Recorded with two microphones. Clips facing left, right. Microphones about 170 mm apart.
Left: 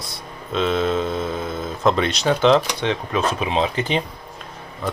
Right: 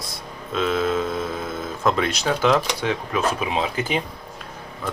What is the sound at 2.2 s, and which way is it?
Speech, 25° left (ahead or behind).